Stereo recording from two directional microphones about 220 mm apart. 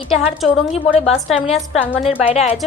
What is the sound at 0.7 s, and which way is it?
Speech, 30° left (ahead or behind).